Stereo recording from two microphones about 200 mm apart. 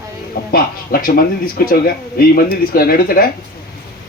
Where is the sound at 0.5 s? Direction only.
50° left (ahead or behind).